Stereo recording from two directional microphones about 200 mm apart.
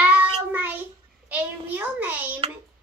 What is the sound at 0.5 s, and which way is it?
A child's voice, 10° right (ahead or behind).